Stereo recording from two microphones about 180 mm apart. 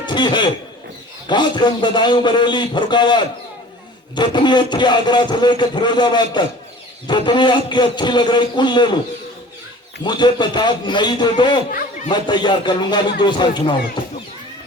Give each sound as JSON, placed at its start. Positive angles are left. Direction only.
{"t": 0.0, "sound": "a sound", "side_deg": 25}
{"t": 1.3, "sound": "speech", "side_deg": 25}
{"t": 10.0, "sound": "speech", "side_deg": 25}